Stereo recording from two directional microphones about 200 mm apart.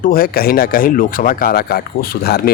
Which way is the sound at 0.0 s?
45° left (ahead or behind).